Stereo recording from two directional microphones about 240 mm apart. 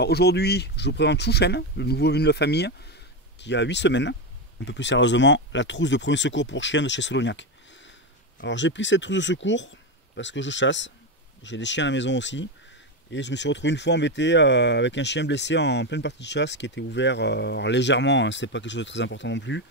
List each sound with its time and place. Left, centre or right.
0.0 s speech: left